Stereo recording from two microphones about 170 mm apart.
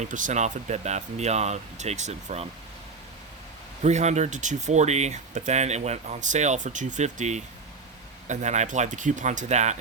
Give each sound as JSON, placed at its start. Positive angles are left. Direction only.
{"t": 0.0, "sound": "speech", "side_deg": -50}
{"t": 3.8, "sound": "speech", "side_deg": -40}